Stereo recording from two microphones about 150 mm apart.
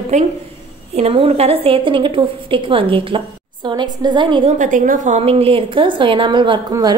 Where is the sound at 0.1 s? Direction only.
50° right (ahead or behind).